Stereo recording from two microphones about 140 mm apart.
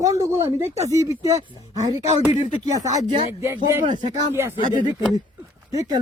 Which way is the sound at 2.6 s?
25° right (ahead or behind).